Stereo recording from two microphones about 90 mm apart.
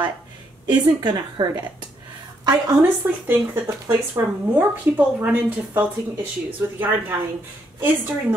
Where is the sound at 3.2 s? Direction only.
20° right (ahead or behind).